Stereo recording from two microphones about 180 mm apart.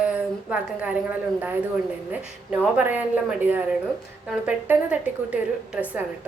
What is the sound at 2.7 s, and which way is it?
A woman's voice, 10° right (ahead or behind).